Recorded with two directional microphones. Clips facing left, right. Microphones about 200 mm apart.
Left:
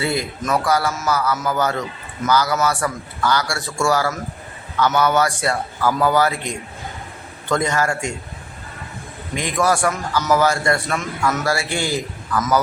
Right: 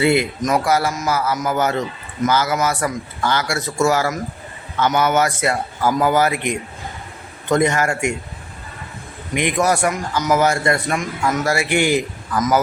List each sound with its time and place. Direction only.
0.4 s a man's voice: 25° right (ahead or behind)
9.3 s a man's voice: 20° right (ahead or behind)